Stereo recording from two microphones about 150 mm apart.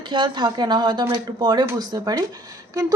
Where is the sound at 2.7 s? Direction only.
25° right (ahead or behind).